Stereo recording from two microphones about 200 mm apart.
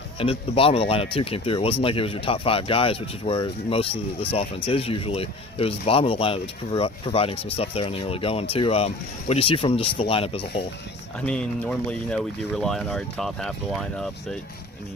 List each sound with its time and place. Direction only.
0.2 s speech: 30° left (ahead or behind)
11.3 s speech: 5° left (ahead or behind)